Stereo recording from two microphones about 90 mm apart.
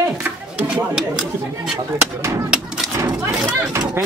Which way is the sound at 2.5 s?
10° right (ahead or behind).